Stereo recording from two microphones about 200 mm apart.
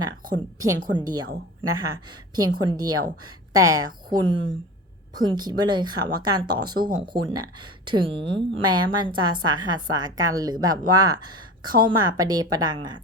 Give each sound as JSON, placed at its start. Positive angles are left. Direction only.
{"t": 0.6, "sound": "speech", "side_deg": -20}
{"t": 2.3, "sound": "a woman's voice", "side_deg": -20}